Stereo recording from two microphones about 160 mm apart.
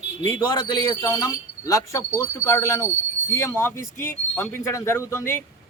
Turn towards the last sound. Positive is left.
turn(degrees=15)  # may be behind; listen again after turning